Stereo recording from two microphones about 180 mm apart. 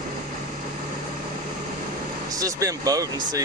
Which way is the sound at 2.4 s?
20° right (ahead or behind).